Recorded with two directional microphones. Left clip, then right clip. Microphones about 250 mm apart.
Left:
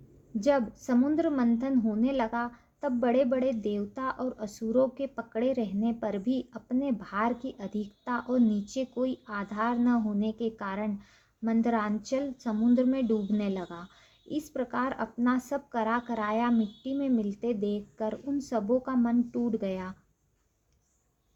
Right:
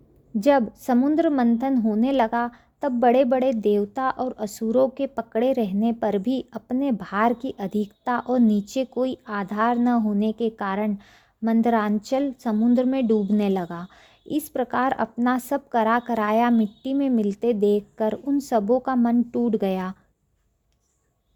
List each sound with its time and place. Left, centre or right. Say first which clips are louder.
0.3 s a woman's voice: right 7 dB; right